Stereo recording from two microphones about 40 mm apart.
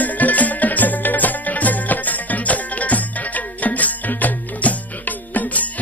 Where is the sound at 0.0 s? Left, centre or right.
Left.